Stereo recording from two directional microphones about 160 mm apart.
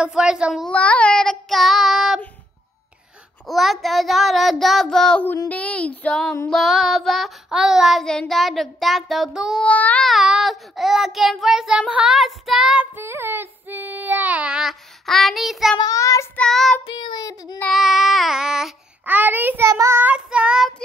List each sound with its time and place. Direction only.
0.0 s child singing: 5° right (ahead or behind)
0.7 s child singing: 10° left (ahead or behind)
3.4 s child singing: centre (ahead or behind)
15.8 s child singing: 20° left (ahead or behind)
16.3 s child singing: 5° left (ahead or behind)
16.8 s child singing: 30° left (ahead or behind)
17.6 s child singing: centre (ahead or behind)